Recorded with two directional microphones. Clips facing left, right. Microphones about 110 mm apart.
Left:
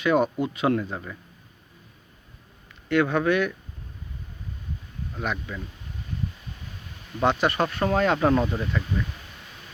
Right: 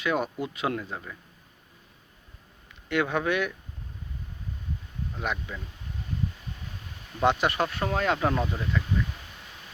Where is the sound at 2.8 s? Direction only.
15° right (ahead or behind).